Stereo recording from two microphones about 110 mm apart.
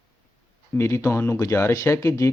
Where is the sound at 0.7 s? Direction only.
25° left (ahead or behind).